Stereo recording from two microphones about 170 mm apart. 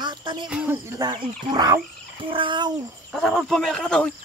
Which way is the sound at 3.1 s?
5° left (ahead or behind).